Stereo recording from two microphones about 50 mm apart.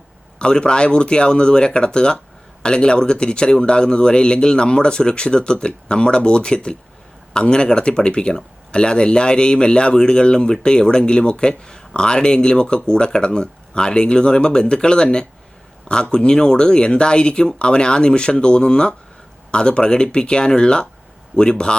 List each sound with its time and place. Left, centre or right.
0.3 s a man's voice: centre